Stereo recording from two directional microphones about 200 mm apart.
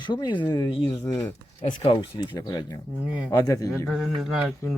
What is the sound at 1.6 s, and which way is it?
Speech, 30° left (ahead or behind).